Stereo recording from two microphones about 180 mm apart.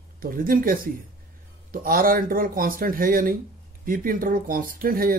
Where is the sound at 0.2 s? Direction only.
50° right (ahead or behind).